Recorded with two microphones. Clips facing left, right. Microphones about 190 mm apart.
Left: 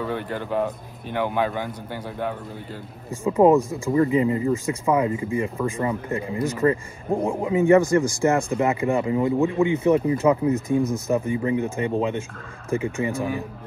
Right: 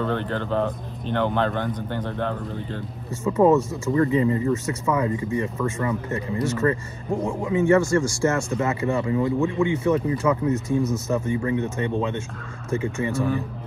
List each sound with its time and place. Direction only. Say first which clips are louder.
0.0 s a man's voice: right 2 dB; 10° left (ahead or behind)
5.1 s speech: even; 35° right (ahead or behind)
5.4 s a man's voice: left 1 dB; 15° left (ahead or behind)
5.8 s speech: left 1 dB; 30° left (ahead or behind)
6.4 s a man's voice: left 2 dB; 15° left (ahead or behind)
7.1 s speech: left 2 dB; 35° left (ahead or behind)
7.6 s a man's voice: left 2 dB; 15° left (ahead or behind)